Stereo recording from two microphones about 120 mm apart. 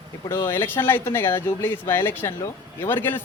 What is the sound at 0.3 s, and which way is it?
Speech, 20° left (ahead or behind).